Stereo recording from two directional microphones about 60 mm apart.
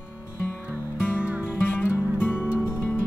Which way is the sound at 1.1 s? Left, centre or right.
Centre.